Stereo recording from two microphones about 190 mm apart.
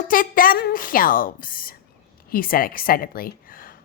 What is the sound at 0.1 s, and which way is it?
A woman's voice, 50° left (ahead or behind).